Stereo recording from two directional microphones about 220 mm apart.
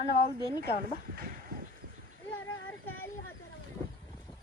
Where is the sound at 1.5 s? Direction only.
40° right (ahead or behind).